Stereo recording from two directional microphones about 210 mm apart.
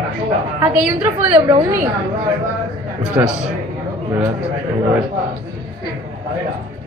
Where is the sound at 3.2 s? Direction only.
15° right (ahead or behind).